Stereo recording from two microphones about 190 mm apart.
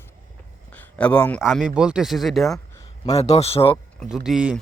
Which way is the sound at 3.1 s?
35° left (ahead or behind).